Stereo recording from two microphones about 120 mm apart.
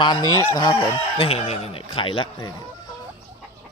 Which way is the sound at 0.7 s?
45° left (ahead or behind).